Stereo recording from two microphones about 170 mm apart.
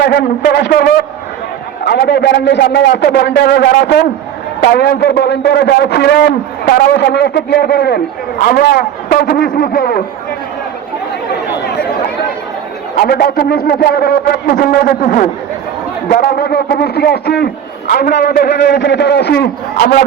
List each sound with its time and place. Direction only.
0.0 s a man's voice: 75° left (ahead or behind); by 10.0 s 60° left (ahead or behind)
13.0 s a man's voice: 65° left (ahead or behind)